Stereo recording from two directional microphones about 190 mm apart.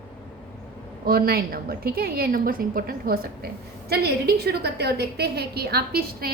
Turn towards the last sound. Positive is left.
turn(degrees=-55)  # may be behind; listen again after turning